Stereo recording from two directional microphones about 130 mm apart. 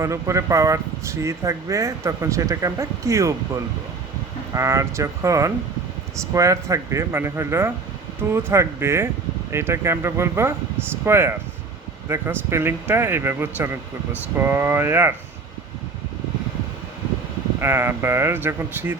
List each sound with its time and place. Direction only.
0.0 s speech: 25° right (ahead or behind)
17.6 s speech: 20° right (ahead or behind)